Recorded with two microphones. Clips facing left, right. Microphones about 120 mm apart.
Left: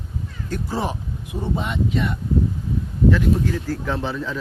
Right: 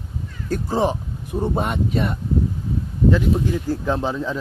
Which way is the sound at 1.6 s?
45° right (ahead or behind).